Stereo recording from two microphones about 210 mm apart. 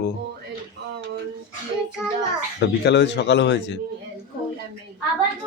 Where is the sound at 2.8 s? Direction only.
55° left (ahead or behind).